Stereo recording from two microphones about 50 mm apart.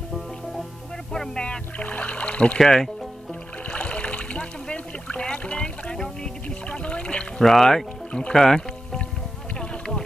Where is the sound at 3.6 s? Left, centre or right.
Left.